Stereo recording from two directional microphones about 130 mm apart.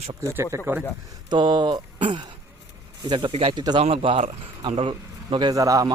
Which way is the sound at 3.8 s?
45° right (ahead or behind).